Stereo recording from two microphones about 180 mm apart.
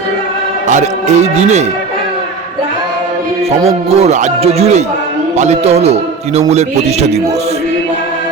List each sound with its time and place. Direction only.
0.7 s a man's voice: 40° right (ahead or behind)
3.8 s a man's voice: 35° right (ahead or behind)